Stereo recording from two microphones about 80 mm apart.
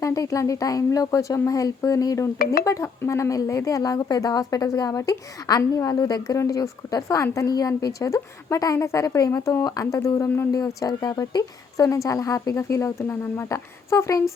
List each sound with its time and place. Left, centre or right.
0.0 s speech: left
10.2 s speech: left
10.7 s speech: left
11.0 s speech: left